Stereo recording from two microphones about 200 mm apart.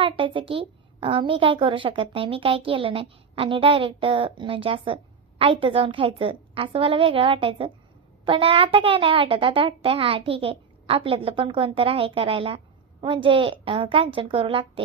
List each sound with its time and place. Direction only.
0.0 s a woman's voice: 25° right (ahead or behind)